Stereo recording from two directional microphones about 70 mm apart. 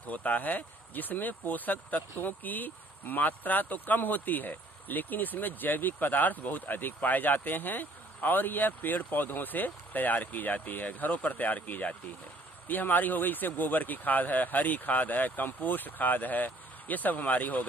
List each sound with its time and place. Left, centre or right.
0.1 s speech: left